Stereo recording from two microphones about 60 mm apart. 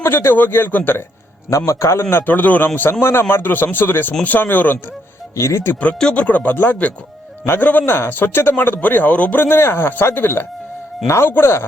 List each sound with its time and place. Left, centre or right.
0.0 s a man's voice: left
1.5 s a man's voice: left
2.2 s a man's voice: left
5.4 s a man's voice: left
6.1 s speech: left
6.5 s a man's voice: left
11.0 s speech: left